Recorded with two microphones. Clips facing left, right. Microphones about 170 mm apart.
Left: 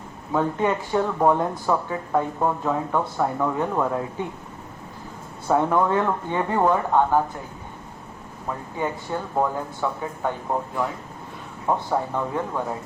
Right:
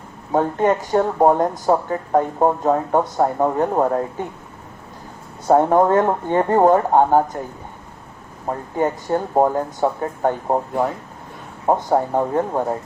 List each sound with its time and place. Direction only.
0.3 s speech: 45° right (ahead or behind)
5.5 s speech: 40° right (ahead or behind)
8.4 s speech: 45° right (ahead or behind)